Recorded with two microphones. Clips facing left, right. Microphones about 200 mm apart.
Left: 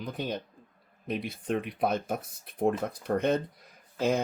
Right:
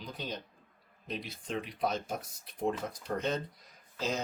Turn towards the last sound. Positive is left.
turn(degrees=55)  # may be behind; listen again after turning